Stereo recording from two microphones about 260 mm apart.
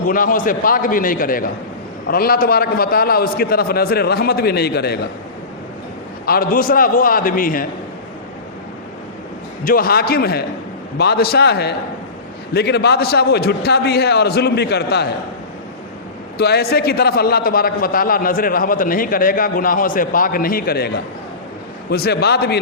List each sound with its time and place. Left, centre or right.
0.1 s a man's voice: left
6.2 s a man's voice: left
9.6 s a man's voice: left
16.4 s a man's voice: left